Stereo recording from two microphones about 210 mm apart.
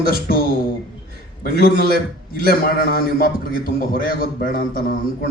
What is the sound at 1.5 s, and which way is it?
A man's voice, 45° left (ahead or behind).